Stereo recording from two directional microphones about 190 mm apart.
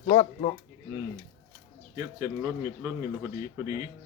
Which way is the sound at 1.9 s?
15° right (ahead or behind).